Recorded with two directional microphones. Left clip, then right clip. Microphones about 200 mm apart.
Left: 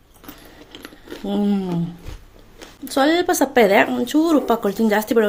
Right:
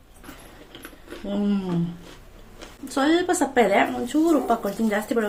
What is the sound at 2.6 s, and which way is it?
Speech, 40° left (ahead or behind).